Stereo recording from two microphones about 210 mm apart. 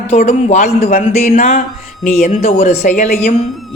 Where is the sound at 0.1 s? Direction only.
35° left (ahead or behind).